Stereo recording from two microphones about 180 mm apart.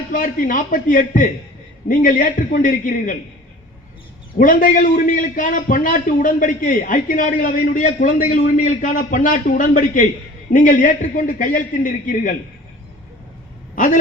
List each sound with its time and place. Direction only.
0.1 s a man's voice: 50° left (ahead or behind)
4.4 s a man's voice: 45° left (ahead or behind)
13.7 s a sound: 45° left (ahead or behind)